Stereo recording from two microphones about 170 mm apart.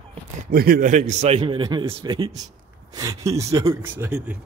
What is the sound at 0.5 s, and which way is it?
A man's voice, 60° right (ahead or behind).